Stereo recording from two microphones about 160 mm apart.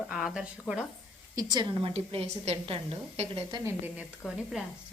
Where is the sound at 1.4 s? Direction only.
25° right (ahead or behind).